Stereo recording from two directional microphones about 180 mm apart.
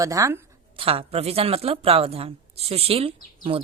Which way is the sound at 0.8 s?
30° right (ahead or behind).